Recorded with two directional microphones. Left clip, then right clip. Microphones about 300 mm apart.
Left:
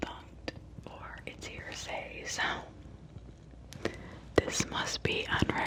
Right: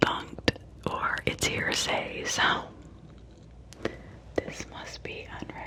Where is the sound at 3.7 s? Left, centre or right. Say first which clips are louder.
Right 3 dB; centre.